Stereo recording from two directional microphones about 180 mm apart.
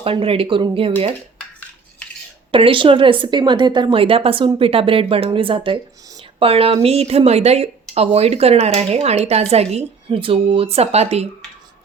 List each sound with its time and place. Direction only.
0.0 s speech: 30° right (ahead or behind)
2.5 s a woman's voice: 30° right (ahead or behind)